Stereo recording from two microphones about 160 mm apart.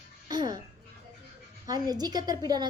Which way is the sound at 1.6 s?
25° right (ahead or behind).